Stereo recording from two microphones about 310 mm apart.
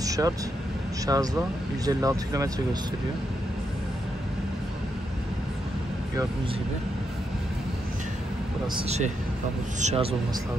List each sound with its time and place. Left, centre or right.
0.0 s vehicle: centre
1.0 s speech: centre
8.7 s a man's voice: centre